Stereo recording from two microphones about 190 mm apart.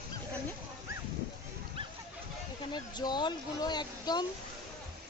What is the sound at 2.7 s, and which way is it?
Speech, 20° left (ahead or behind).